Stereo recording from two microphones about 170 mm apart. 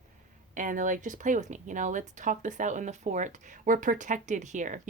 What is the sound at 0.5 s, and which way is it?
A woman's voice, 50° right (ahead or behind).